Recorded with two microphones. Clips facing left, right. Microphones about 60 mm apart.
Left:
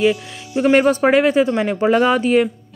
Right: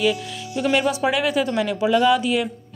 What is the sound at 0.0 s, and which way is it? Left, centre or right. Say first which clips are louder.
Speech: left 4 dB; left.